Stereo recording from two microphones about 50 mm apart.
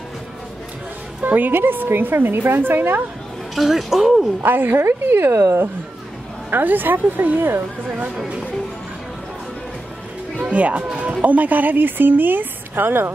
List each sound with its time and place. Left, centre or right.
1.2 s a woman's voice: right
3.5 s speech: centre
4.4 s a woman's voice: right
6.5 s a woman's voice: right
10.3 s a woman's voice: right